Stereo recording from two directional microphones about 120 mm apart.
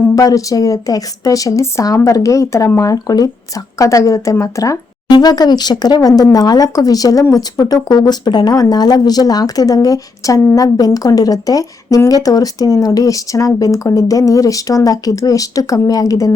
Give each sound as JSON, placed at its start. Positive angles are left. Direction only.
{"t": 0.2, "sound": "a woman's voice", "side_deg": 30}